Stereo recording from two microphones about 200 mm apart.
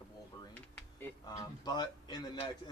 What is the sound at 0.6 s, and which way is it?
Speech, 10° left (ahead or behind).